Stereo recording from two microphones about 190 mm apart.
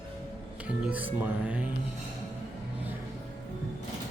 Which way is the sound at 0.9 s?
10° right (ahead or behind).